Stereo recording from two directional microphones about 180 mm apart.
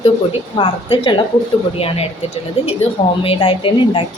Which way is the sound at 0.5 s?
30° left (ahead or behind).